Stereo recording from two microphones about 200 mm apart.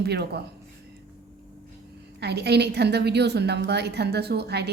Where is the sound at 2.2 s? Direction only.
55° right (ahead or behind).